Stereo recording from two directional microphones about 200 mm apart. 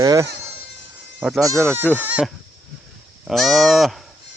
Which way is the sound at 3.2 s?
Centre (ahead or behind).